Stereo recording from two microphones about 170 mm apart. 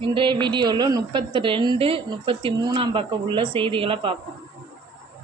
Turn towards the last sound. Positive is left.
turn(degrees=-30)  # may be behind; listen again after turning